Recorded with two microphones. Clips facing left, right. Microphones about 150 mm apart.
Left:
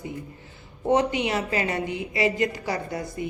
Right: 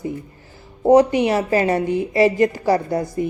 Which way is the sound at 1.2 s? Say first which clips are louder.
Right 8 dB; 40° right (ahead or behind).